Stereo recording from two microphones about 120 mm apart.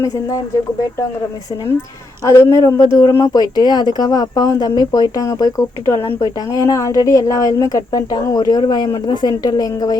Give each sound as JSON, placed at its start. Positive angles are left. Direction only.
{"t": 2.2, "sound": "speech", "side_deg": 25}